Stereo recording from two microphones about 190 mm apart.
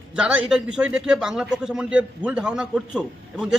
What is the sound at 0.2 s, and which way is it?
A man's voice, 5° right (ahead or behind).